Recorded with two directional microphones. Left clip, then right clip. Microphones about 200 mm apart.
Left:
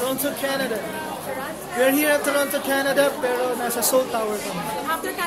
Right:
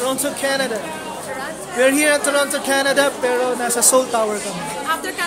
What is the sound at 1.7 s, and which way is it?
A woman's voice, 20° right (ahead or behind).